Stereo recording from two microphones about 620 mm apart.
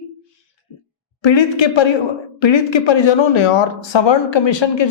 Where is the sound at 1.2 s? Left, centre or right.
Left.